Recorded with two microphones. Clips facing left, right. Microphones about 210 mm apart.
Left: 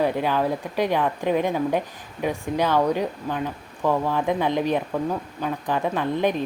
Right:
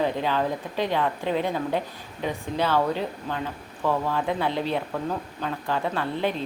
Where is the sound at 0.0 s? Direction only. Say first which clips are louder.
Left 3 dB; 10° left (ahead or behind).